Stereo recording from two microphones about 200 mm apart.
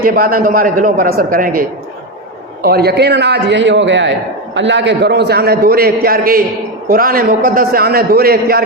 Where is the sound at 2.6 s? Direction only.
50° right (ahead or behind).